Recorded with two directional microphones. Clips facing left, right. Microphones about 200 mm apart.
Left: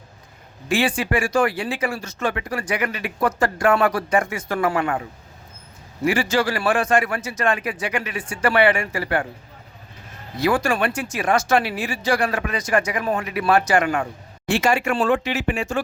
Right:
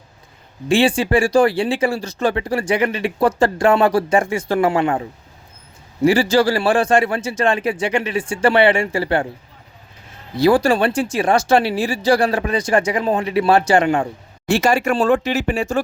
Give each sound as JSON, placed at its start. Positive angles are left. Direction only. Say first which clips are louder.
{"t": 0.7, "sound": "speech", "louder": "right 6 dB", "side_deg": -30}
{"t": 6.1, "sound": "speech", "louder": "right 6 dB", "side_deg": -35}
{"t": 10.3, "sound": "speech", "louder": "right 6 dB", "side_deg": -35}
{"t": 14.5, "sound": "speech", "louder": "right 4 dB", "side_deg": -40}